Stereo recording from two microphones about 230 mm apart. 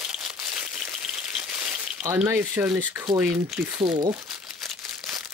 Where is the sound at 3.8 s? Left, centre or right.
Centre.